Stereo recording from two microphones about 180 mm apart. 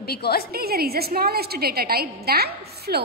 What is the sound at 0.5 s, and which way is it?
A woman's voice, 60° right (ahead or behind).